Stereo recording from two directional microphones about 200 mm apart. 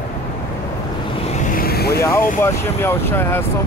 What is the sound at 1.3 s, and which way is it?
Vehicle, 40° left (ahead or behind).